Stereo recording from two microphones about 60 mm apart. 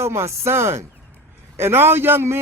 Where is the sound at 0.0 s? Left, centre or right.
Right.